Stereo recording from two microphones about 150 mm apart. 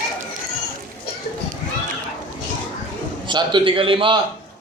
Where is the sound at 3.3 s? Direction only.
35° right (ahead or behind).